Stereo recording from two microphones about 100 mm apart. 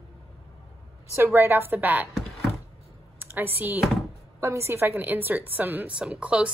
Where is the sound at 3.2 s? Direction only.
20° right (ahead or behind).